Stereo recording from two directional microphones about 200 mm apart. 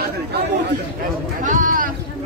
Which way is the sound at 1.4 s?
40° right (ahead or behind).